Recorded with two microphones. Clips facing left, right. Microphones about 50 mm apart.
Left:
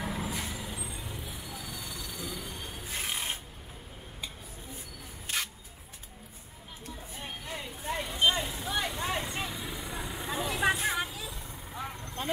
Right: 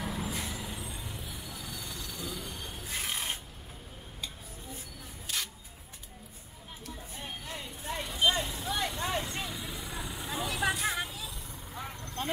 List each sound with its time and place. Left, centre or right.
0.0 s vehicle: centre
7.2 s vehicle: centre
10.6 s a sound: centre
11.0 s vehicle: centre